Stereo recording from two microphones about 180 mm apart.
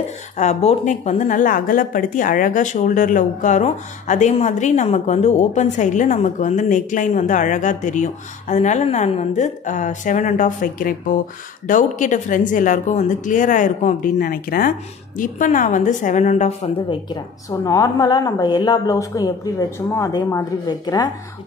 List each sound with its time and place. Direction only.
0.4 s a woman's voice: 35° left (ahead or behind); by 21.1 s 20° left (ahead or behind)